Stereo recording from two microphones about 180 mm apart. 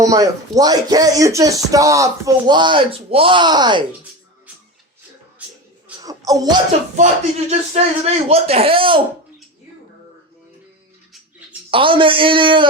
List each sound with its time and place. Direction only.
0.0 s speech: 20° right (ahead or behind)
6.0 s a sound: 20° right (ahead or behind)
6.9 s speech: 40° right (ahead or behind)
11.7 s speech: 30° right (ahead or behind)